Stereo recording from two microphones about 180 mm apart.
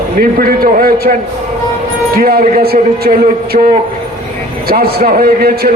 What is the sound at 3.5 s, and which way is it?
Speech, 45° right (ahead or behind).